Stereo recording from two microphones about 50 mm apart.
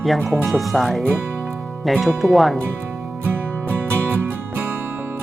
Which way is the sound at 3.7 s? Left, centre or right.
Right.